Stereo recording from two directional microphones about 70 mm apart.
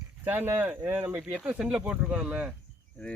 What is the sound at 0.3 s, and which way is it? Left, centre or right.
Speech, right.